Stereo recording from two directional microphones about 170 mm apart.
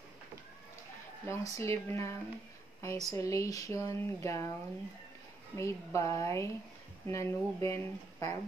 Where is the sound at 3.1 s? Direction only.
20° left (ahead or behind).